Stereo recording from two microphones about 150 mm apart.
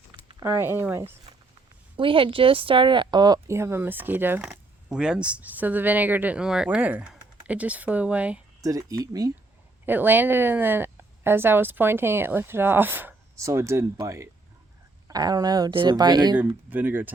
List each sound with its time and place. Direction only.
0.3 s speech: 15° right (ahead or behind)
2.0 s speech: 35° right (ahead or behind); by 8.4 s 10° right (ahead or behind)
8.6 s speech: 25° right (ahead or behind)
9.8 s speech: 10° right (ahead or behind); by 16.4 s 30° right (ahead or behind)
16.6 s speech: 10° right (ahead or behind)